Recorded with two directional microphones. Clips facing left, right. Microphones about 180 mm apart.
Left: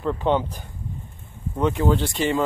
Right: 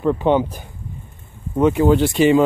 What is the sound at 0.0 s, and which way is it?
Speech, 10° right (ahead or behind).